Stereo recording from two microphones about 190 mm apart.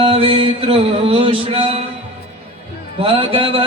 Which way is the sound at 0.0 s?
30° right (ahead or behind).